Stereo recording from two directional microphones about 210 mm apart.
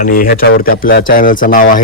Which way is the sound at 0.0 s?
40° left (ahead or behind).